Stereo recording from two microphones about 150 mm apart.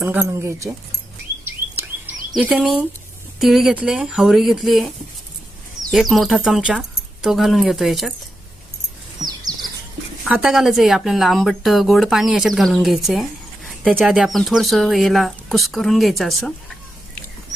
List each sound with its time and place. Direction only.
0.0 s speech: 15° right (ahead or behind)
1.5 s patter: 15° right (ahead or behind)
2.3 s speech: 5° right (ahead or behind)
5.9 s speech: centre (ahead or behind)
9.2 s a sound: 25° right (ahead or behind)
10.2 s speech: 5° right (ahead or behind)